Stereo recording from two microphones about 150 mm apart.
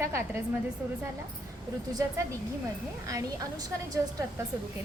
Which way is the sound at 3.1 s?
25° right (ahead or behind).